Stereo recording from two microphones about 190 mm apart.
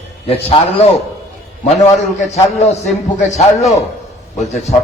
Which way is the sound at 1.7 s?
35° left (ahead or behind).